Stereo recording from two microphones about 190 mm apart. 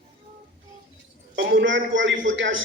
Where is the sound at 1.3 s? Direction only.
75° right (ahead or behind).